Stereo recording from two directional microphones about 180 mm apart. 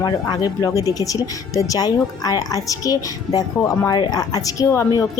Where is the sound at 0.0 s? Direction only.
20° left (ahead or behind).